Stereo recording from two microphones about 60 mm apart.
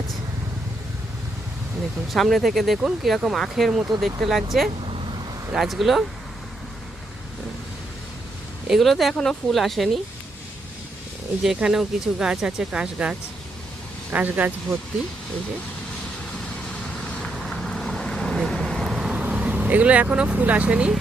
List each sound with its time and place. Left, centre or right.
2.1 s speech: centre
8.6 s speech: centre
11.4 s speech: centre
14.1 s speech: right
16.6 s vehicle: centre
18.9 s vehicle: centre
19.2 s speech: right